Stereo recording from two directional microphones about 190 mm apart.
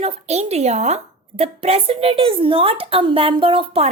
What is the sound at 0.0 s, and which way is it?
A woman's voice, 35° right (ahead or behind).